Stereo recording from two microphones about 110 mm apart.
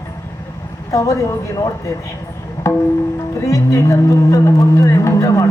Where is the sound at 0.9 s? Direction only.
30° left (ahead or behind).